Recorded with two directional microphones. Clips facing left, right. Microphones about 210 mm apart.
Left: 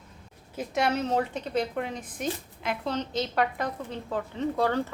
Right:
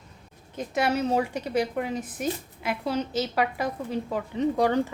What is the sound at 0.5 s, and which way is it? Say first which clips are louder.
A woman's voice: right 1 dB; centre (ahead or behind).